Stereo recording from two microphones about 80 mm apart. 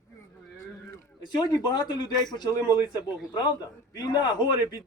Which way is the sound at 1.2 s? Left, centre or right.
Left.